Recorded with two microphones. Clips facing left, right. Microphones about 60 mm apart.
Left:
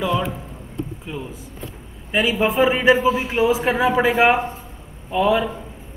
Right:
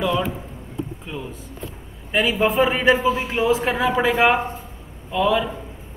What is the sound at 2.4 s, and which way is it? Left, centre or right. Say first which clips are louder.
A man's voice: left 2 dB; centre.